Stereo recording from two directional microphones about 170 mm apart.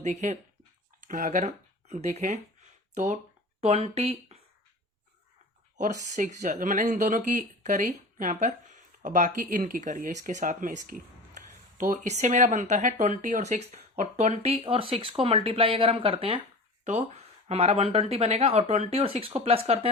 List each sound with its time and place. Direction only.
0.0 s speech: 40° right (ahead or behind)
5.7 s speech: 45° right (ahead or behind)